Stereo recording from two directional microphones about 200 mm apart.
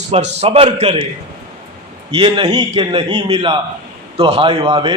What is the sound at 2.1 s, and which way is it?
A man's voice, 25° right (ahead or behind).